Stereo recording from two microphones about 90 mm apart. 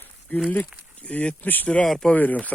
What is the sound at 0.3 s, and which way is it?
Speech, 15° left (ahead or behind).